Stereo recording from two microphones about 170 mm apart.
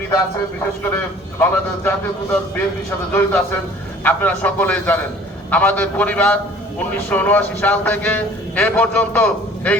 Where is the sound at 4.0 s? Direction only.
10° left (ahead or behind).